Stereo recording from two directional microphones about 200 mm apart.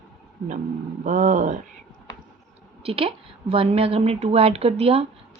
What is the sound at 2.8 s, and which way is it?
A woman's voice, 30° right (ahead or behind).